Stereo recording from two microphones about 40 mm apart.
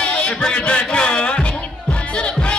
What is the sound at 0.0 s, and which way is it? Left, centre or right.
Music, left.